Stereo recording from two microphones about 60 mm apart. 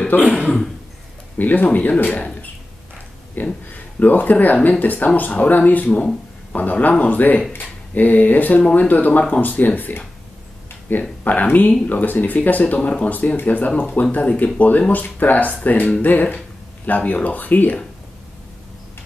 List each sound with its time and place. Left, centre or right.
0.1 s speech: left
1.4 s speech: left
3.4 s speech: left